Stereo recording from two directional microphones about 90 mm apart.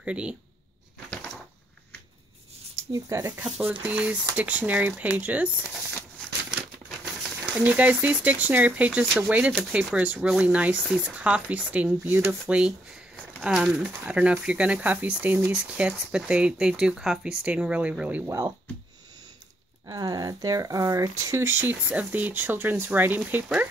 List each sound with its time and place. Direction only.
0.0 s speech: 15° right (ahead or behind)
2.9 s speech: 35° right (ahead or behind)
3.4 s speech: 10° right (ahead or behind)
7.5 s speech: 15° right (ahead or behind)
19.9 s speech: 50° right (ahead or behind)
21.4 s speech: 25° right (ahead or behind)